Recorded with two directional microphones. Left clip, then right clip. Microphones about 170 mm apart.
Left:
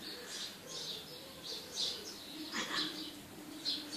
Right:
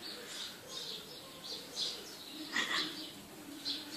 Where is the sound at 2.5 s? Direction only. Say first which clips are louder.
Right 4 dB; 35° right (ahead or behind).